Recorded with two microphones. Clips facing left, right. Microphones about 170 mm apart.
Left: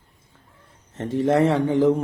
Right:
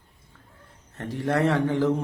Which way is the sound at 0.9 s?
20° left (ahead or behind).